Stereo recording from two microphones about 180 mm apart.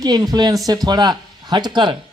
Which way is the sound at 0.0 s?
20° right (ahead or behind).